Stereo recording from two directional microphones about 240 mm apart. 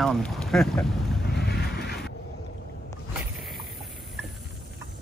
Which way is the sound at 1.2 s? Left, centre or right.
Left.